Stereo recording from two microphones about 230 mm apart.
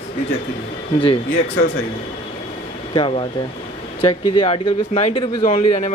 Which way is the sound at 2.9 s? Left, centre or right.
Left.